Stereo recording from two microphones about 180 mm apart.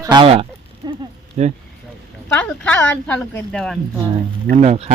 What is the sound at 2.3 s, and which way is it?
Speech, 10° left (ahead or behind).